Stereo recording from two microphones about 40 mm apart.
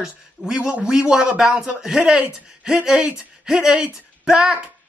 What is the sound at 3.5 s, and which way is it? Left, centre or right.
Speech, centre.